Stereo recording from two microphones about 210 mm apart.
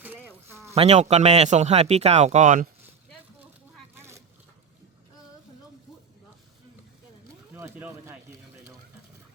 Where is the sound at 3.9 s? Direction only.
10° right (ahead or behind).